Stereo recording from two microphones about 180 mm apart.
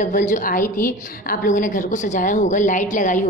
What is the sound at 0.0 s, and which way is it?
A woman's voice, 45° left (ahead or behind).